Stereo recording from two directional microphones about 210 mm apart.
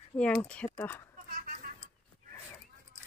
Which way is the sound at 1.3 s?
45° right (ahead or behind).